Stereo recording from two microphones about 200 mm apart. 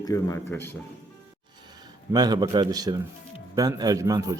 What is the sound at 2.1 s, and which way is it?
A man's voice, 20° right (ahead or behind).